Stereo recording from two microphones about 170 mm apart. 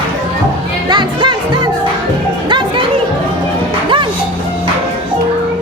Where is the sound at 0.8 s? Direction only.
25° right (ahead or behind).